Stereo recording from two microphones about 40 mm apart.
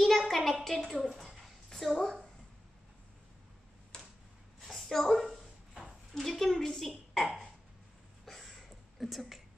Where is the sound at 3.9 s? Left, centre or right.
Left.